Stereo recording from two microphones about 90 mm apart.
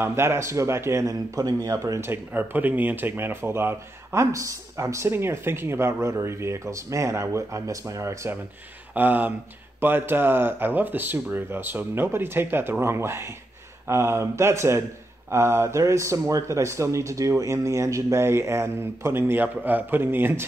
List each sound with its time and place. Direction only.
0.0 s speech: 30° right (ahead or behind)
8.9 s speech: 20° right (ahead or behind)